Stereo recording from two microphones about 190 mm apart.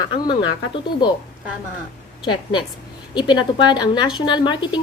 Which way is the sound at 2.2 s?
25° left (ahead or behind).